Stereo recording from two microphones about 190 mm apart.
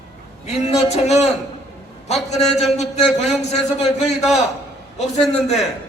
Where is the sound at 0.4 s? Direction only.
35° left (ahead or behind).